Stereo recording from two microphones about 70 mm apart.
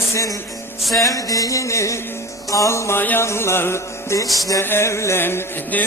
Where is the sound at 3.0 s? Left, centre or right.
Left.